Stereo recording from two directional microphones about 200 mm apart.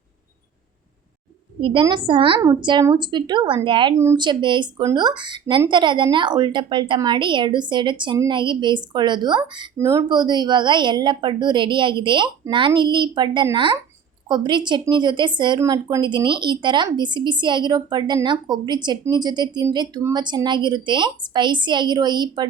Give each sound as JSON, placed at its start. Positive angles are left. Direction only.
{"t": 1.6, "sound": "a woman's voice", "side_deg": -25}
{"t": 3.9, "sound": "a woman's voice", "side_deg": -15}